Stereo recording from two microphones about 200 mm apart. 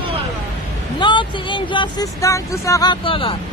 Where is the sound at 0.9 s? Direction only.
25° left (ahead or behind).